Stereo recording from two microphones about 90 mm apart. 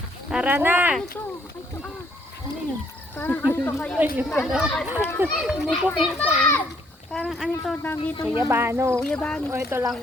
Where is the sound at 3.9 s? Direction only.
15° right (ahead or behind).